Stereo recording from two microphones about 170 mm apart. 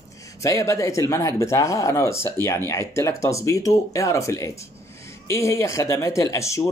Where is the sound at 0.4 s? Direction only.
20° left (ahead or behind).